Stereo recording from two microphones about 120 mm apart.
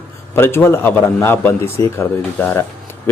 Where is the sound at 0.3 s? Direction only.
20° left (ahead or behind).